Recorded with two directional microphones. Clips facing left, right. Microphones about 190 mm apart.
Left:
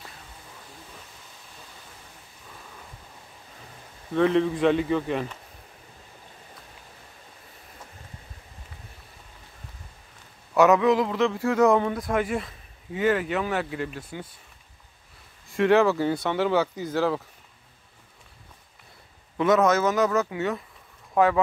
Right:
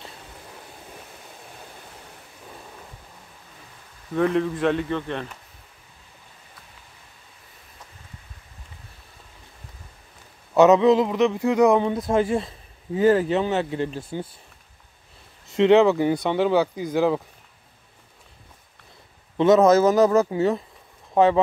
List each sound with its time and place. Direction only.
4.1 s speech: centre (ahead or behind)
10.5 s a man's voice: 25° right (ahead or behind)
15.4 s speech: 20° right (ahead or behind)
19.3 s a man's voice: 30° right (ahead or behind)